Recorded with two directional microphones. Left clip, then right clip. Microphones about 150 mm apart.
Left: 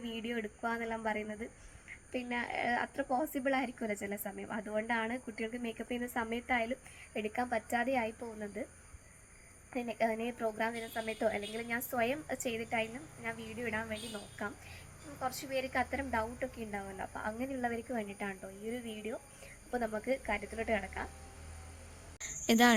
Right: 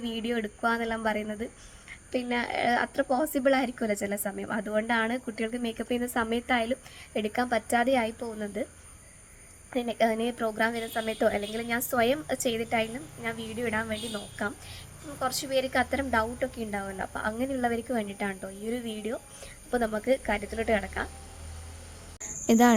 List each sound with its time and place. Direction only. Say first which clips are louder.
0.2 s speech: right 9 dB; 25° right (ahead or behind)
9.6 s speech: right 8 dB; 20° right (ahead or behind)
22.2 s insect: right 5 dB; 10° right (ahead or behind)